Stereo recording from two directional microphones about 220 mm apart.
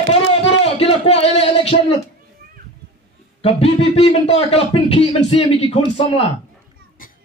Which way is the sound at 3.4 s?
25° left (ahead or behind).